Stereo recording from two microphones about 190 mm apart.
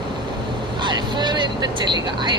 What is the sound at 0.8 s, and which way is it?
Speech, 25° right (ahead or behind).